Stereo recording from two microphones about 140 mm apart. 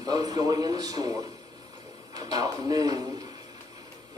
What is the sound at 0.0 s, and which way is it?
A man's voice, 25° right (ahead or behind).